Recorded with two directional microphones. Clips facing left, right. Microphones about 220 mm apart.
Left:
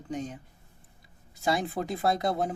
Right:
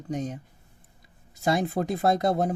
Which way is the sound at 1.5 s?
45° right (ahead or behind).